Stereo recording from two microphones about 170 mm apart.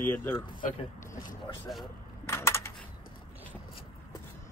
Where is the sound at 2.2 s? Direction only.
15° left (ahead or behind).